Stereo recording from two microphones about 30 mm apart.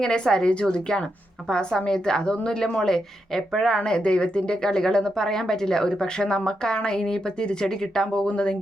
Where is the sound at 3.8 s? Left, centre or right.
Left.